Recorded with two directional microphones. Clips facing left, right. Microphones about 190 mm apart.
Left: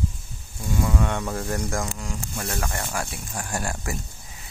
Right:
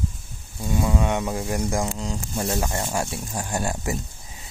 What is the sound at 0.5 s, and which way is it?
Speech, 20° right (ahead or behind).